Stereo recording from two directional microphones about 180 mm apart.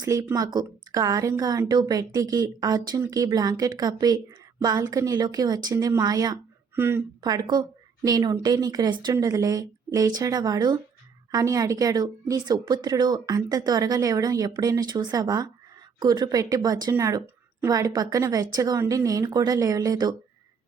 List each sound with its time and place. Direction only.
0.0 s a woman's voice: 20° right (ahead or behind)